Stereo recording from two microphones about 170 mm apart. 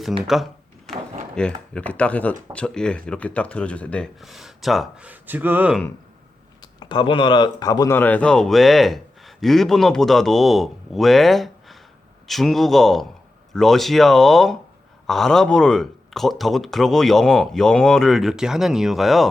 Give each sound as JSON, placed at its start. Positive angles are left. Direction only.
{"t": 0.9, "sound": "a sound", "side_deg": 0}
{"t": 1.4, "sound": "speech", "side_deg": 5}
{"t": 6.6, "sound": "speech", "side_deg": 25}